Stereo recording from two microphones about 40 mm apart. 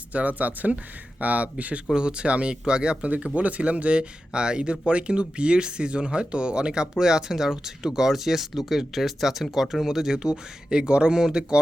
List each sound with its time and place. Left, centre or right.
0.1 s speech: right
2.0 s speech: right
4.3 s speech: right